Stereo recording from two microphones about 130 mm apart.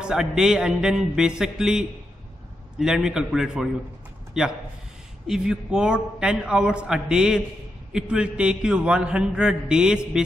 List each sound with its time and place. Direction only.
0.0 s music: 5° right (ahead or behind)
5.2 s a man's voice: 5° right (ahead or behind)